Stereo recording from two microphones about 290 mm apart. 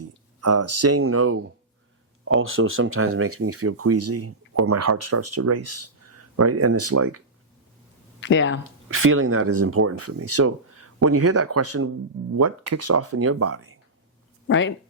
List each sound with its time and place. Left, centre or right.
0.4 s speech: right
8.2 s speech: left
8.9 s speech: right
14.4 s speech: left